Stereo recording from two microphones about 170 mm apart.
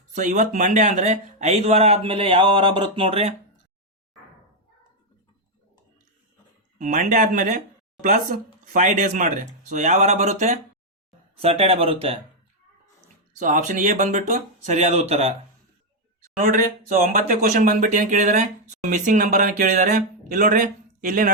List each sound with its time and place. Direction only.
0.1 s speech: 50° right (ahead or behind)
6.7 s speech: 50° right (ahead or behind); by 12.2 s 35° right (ahead or behind)
13.4 s speech: 45° right (ahead or behind)
16.4 s speech: 55° right (ahead or behind)